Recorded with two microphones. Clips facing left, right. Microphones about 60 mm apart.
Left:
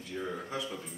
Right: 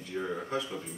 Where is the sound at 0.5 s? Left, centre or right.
Centre.